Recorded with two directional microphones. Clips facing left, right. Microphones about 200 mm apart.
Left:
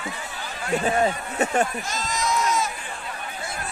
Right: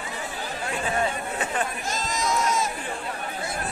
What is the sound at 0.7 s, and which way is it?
Speech, 40° left (ahead or behind).